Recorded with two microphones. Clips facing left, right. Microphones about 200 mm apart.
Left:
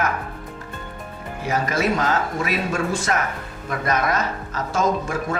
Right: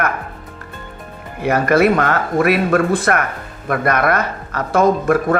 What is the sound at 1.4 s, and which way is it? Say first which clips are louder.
Speech: right 9 dB; 60° right (ahead or behind).